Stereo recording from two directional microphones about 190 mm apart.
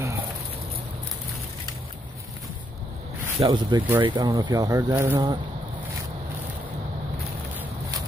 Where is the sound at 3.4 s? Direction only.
25° right (ahead or behind).